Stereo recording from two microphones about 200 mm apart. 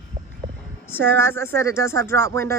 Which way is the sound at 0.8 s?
10° left (ahead or behind).